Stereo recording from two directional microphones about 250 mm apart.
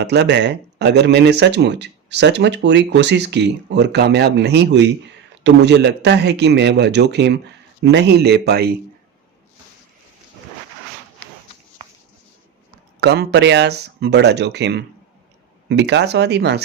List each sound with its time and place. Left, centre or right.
0.0 s speech: right
13.0 s speech: right